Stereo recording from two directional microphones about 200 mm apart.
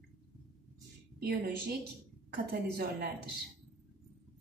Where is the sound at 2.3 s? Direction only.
50° right (ahead or behind).